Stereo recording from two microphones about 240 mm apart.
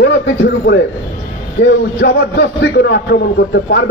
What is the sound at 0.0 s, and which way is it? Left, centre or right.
A man's voice, left.